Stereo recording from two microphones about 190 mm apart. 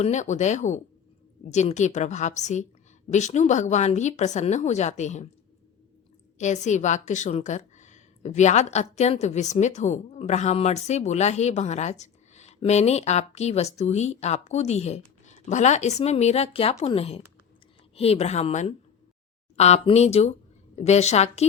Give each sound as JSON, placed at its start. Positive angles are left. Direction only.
{"t": 0.0, "sound": "a woman's voice", "side_deg": 40}
{"t": 6.4, "sound": "a woman's voice", "side_deg": 40}